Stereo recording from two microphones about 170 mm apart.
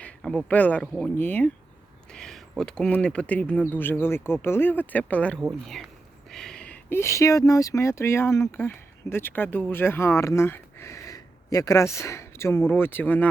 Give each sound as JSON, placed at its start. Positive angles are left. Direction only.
{"t": 0.0, "sound": "speech", "side_deg": 5}